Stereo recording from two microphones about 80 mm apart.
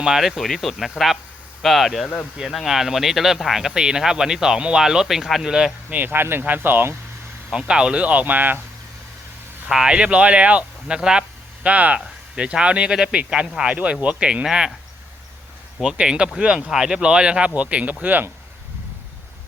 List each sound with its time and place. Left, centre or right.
0.0 s speech: centre
5.9 s speech: right
7.5 s speech: centre
9.6 s speech: centre
15.8 s speech: centre